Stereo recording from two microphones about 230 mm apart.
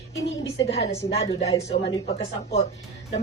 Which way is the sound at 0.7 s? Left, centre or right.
Left.